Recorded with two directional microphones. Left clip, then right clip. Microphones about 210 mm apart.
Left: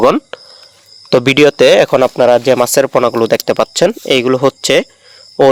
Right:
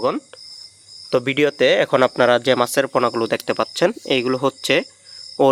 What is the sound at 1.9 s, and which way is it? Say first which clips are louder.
Speech: left 6 dB; 25° left (ahead or behind).